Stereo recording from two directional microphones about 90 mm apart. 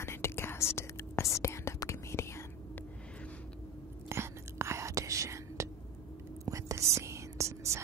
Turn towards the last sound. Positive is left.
turn(degrees=-35)  # may be behind; listen again after turning